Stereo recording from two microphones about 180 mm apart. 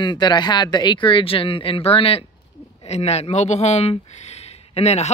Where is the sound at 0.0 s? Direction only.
25° left (ahead or behind).